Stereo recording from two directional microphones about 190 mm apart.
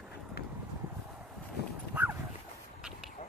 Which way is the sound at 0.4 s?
55° left (ahead or behind).